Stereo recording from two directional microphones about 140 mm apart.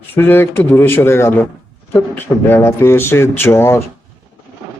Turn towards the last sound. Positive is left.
turn(degrees=20)  # may be behind; listen again after turning